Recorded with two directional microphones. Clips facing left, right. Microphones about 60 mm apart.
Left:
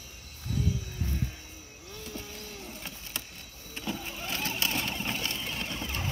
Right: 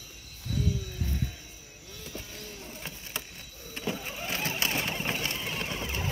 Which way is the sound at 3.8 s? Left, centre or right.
Right.